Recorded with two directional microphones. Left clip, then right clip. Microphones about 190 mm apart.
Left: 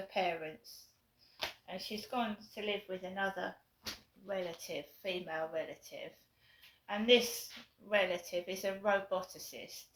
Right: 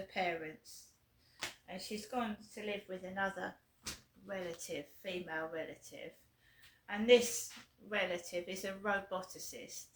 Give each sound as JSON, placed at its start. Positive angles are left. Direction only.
{"t": 0.1, "sound": "speech", "side_deg": -20}